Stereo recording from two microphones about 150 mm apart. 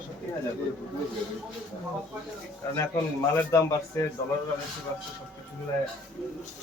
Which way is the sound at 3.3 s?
20° left (ahead or behind).